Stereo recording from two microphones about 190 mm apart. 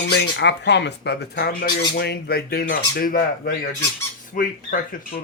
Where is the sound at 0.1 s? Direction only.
65° left (ahead or behind); by 5.2 s 50° left (ahead or behind).